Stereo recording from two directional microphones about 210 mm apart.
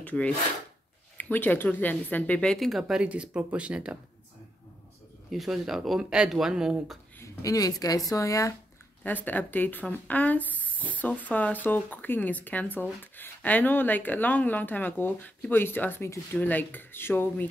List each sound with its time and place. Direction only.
0.0 s speech: 5° left (ahead or behind)
5.3 s speech: centre (ahead or behind)
7.2 s speech: 15° left (ahead or behind)